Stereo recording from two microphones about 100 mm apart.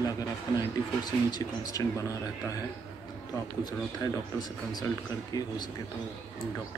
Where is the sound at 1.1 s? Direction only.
40° left (ahead or behind).